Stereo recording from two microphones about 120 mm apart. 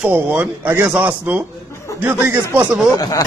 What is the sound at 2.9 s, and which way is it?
Speech, 30° left (ahead or behind).